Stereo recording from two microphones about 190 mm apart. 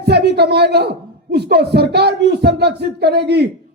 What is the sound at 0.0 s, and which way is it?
A woman's voice, 60° right (ahead or behind).